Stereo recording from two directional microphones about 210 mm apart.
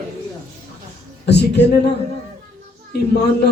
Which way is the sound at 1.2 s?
55° left (ahead or behind).